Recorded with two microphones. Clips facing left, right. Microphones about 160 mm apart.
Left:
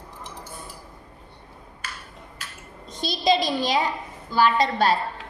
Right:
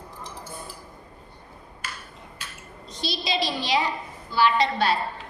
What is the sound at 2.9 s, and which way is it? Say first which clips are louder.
A woman's voice: left 7 dB; 50° left (ahead or behind).